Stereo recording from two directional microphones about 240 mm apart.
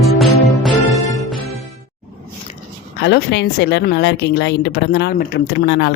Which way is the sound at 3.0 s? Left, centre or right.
Left.